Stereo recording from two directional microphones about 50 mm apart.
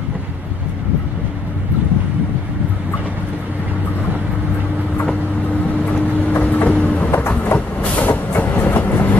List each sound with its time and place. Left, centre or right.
5.9 s vehicle: left
7.5 s train: left